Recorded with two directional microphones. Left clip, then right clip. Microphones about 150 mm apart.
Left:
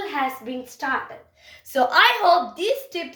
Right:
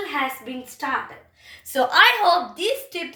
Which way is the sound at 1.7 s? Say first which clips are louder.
Right 1 dB; 55° left (ahead or behind).